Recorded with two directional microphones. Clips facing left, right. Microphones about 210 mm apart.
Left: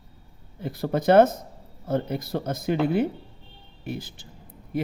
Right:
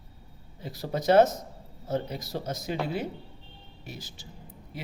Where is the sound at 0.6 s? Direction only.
55° left (ahead or behind).